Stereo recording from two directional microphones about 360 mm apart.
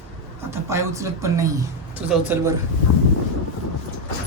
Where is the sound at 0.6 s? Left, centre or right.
Centre.